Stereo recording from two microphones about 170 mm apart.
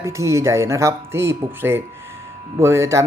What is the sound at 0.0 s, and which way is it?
Speech, 15° right (ahead or behind).